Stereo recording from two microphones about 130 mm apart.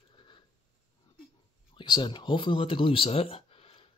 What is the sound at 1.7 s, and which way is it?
Speech, 35° left (ahead or behind).